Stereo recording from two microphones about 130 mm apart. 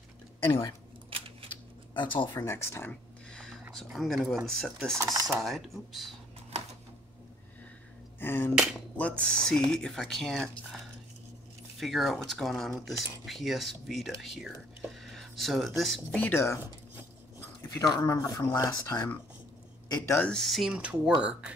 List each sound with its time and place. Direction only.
0.5 s speech: 35° left (ahead or behind)
2.0 s speech: 35° left (ahead or behind)
2.4 s speech: 20° left (ahead or behind)
3.3 s a sound: 5° left (ahead or behind)
3.9 s speech: centre (ahead or behind)
4.9 s speech: 25° right (ahead or behind)
5.4 s speech: centre (ahead or behind)
8.2 s a sound: 15° left (ahead or behind)
8.9 s speech: 10° left (ahead or behind)
11.8 s speech: centre (ahead or behind); by 16.5 s 15° left (ahead or behind)
17.6 s speech: 30° left (ahead or behind)
20.1 s speech: 10° left (ahead or behind)
20.7 s speech: 10° right (ahead or behind)